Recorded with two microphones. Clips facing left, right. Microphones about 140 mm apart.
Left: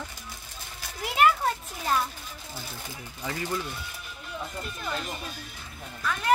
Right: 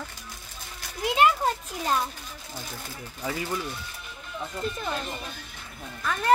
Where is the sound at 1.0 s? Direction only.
20° right (ahead or behind).